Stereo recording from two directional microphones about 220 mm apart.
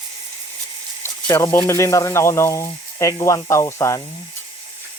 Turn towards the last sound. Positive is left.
turn(degrees=15)  # may be behind; listen again after turning